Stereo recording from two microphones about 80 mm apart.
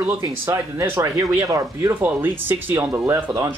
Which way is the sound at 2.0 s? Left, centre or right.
Right.